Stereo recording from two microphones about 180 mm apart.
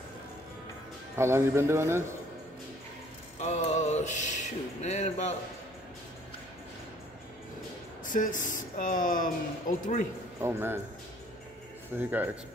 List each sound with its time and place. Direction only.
1.1 s speech: 15° right (ahead or behind)
3.3 s a sound: 40° left (ahead or behind)
8.0 s speech: 45° left (ahead or behind)
10.4 s speech: 10° right (ahead or behind)
12.0 s speech: 10° right (ahead or behind)